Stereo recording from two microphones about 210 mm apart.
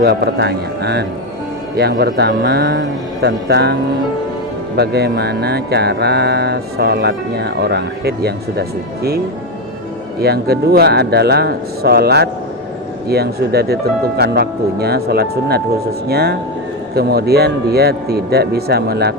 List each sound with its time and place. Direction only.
0.0 s speech: 50° right (ahead or behind)
4.8 s speech: 50° right (ahead or behind)
10.2 s speech: 50° right (ahead or behind)